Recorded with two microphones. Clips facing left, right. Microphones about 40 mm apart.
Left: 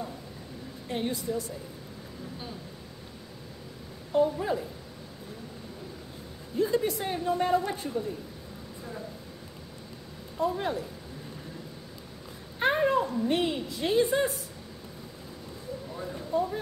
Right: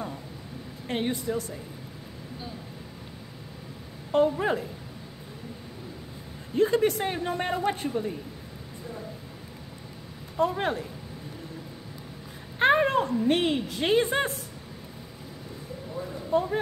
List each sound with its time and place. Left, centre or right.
0.8 s speech: right
4.1 s speech: right
6.5 s speech: right
10.4 s speech: right
12.5 s a woman's voice: right
16.3 s speech: right